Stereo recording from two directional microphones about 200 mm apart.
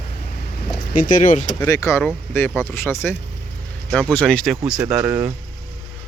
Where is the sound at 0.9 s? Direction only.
40° left (ahead or behind).